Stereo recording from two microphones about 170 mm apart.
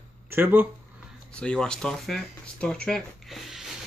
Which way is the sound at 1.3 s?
5° left (ahead or behind).